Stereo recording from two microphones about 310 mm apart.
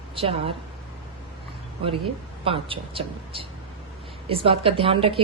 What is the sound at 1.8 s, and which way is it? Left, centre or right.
Speech, centre.